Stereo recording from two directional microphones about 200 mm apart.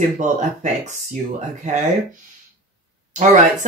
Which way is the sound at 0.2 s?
40° right (ahead or behind).